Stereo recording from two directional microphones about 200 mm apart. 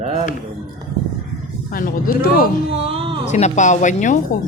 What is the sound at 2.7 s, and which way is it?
Speech, 30° right (ahead or behind).